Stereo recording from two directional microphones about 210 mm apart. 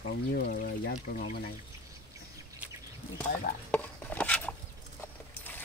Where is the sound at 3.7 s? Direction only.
5° left (ahead or behind).